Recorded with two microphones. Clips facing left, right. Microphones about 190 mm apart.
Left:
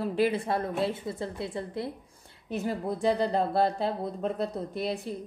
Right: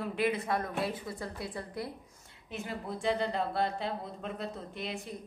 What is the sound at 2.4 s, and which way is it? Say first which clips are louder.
A woman's voice: left 8 dB; 40° left (ahead or behind).